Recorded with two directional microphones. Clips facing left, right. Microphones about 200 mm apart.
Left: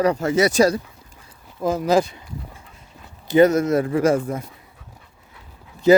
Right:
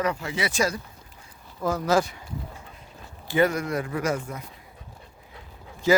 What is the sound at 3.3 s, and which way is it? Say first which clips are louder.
Speech: left 8 dB; 20° left (ahead or behind).